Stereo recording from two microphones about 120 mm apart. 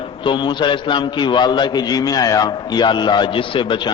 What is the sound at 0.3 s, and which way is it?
A man's voice, 40° left (ahead or behind).